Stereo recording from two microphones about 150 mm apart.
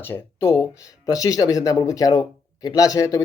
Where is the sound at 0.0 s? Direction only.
15° left (ahead or behind).